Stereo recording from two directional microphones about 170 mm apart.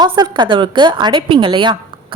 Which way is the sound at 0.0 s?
25° right (ahead or behind).